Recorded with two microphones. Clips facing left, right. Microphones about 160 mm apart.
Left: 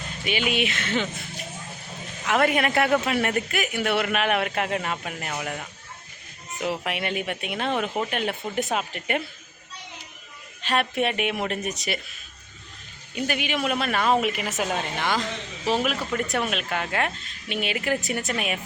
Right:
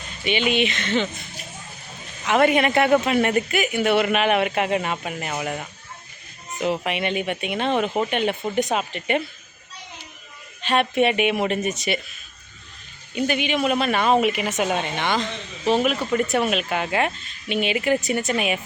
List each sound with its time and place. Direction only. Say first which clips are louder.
0.3 s speech: right 4 dB; 5° left (ahead or behind)
2.2 s speech: right 4 dB; centre (ahead or behind)
10.6 s speech: right 5 dB; centre (ahead or behind)
13.1 s speech: right 4 dB; centre (ahead or behind)